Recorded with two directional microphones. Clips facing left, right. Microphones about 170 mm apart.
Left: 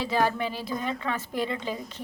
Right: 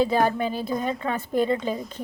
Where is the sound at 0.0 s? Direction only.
45° right (ahead or behind).